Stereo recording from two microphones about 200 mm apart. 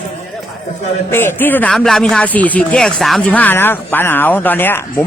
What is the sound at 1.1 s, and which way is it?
Speech, 10° left (ahead or behind).